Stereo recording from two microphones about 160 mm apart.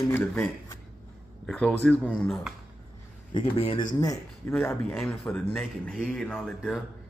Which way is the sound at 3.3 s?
35° left (ahead or behind).